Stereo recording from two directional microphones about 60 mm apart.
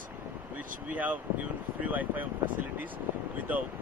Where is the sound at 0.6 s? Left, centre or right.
Right.